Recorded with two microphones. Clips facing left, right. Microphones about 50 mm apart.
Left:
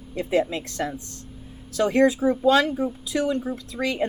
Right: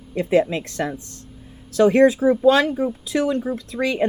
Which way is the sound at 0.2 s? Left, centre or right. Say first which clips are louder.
Right 5 dB; right.